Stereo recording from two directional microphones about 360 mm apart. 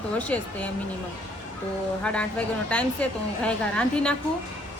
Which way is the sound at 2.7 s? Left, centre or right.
Centre.